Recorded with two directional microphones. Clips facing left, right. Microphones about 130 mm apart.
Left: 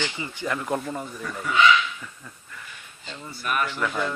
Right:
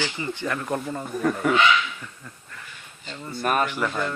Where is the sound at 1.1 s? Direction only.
55° right (ahead or behind).